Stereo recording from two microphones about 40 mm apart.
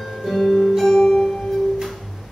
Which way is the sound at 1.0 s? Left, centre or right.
Centre.